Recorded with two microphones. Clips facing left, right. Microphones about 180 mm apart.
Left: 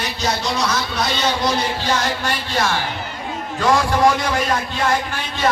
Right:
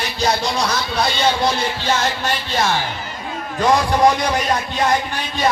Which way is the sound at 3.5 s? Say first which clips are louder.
Right 1 dB; 20° right (ahead or behind).